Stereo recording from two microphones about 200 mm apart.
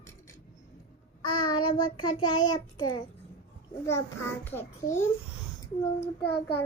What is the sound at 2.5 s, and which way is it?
Speech, 20° left (ahead or behind).